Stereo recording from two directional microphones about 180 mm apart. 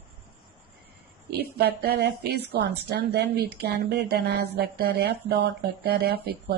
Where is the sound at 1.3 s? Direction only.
60° right (ahead or behind).